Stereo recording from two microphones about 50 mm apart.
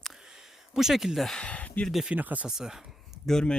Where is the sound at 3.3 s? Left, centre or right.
Centre.